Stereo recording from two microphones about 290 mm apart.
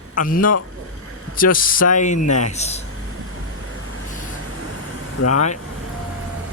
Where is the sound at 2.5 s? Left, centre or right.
Left.